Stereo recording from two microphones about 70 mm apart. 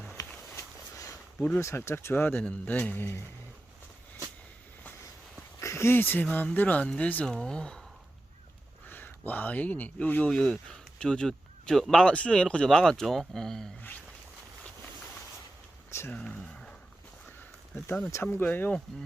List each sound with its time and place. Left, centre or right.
0.2 s a sound: left
1.6 s speech: left
5.5 s a sound: left
6.3 s speech: left
8.9 s speech: left
10.2 s speech: centre
12.0 s speech: centre
15.9 s a sound: left
16.1 s speech: centre
18.1 s speech: left